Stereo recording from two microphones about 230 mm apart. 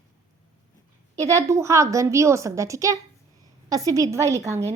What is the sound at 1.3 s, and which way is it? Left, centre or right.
A woman's voice, centre.